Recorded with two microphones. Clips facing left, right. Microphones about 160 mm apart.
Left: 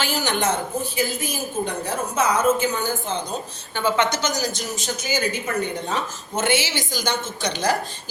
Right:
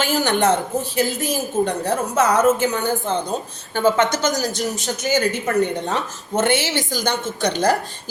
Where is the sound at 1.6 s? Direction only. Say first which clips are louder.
Right 5 dB; 70° right (ahead or behind).